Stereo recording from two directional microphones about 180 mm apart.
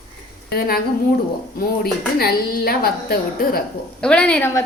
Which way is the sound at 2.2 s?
60° left (ahead or behind).